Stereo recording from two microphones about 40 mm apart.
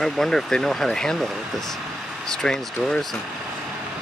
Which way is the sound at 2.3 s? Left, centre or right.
Centre.